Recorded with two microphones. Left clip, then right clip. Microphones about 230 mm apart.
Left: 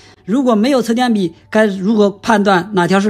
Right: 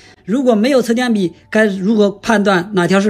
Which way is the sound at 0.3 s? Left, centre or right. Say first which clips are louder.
Right 1 dB; centre.